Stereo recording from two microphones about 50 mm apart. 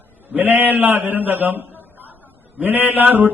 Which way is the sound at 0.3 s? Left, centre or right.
Right.